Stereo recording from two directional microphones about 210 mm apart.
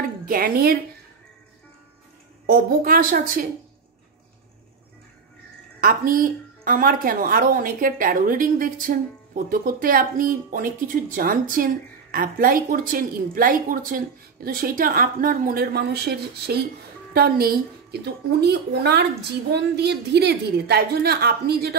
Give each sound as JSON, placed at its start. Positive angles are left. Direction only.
{"t": 0.2, "sound": "a woman's voice", "side_deg": -45}
{"t": 2.4, "sound": "a woman's voice", "side_deg": -45}
{"t": 5.8, "sound": "a woman's voice", "side_deg": -40}